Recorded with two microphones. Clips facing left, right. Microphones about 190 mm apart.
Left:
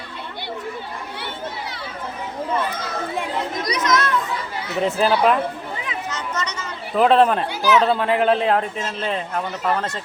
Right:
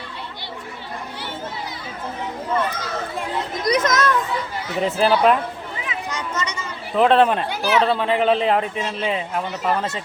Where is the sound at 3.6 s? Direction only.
50° right (ahead or behind).